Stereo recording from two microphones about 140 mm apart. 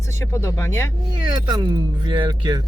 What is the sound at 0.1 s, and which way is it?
Speech, 20° left (ahead or behind).